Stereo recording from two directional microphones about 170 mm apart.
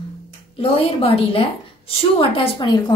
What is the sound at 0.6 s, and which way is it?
A woman's voice, 35° left (ahead or behind).